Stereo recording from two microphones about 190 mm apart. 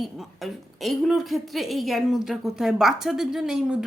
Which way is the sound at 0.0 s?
Centre (ahead or behind).